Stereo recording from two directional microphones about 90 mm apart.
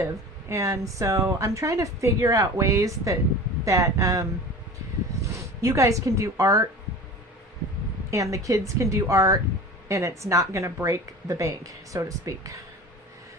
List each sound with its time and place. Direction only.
0.0 s speech: 35° right (ahead or behind)
8.1 s speech: 35° right (ahead or behind)